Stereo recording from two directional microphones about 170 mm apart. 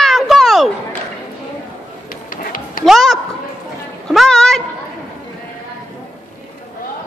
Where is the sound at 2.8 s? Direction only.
Centre (ahead or behind).